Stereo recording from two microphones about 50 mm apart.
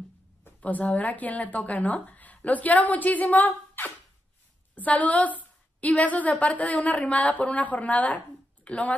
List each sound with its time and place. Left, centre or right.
0.6 s a woman's voice: left